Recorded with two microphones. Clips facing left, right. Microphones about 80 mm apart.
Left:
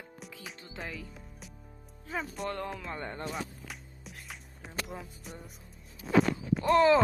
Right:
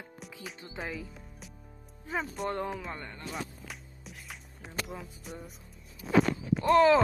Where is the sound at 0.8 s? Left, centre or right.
Centre.